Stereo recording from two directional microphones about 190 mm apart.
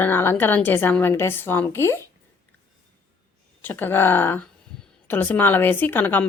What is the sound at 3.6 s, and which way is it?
Speech, 10° left (ahead or behind).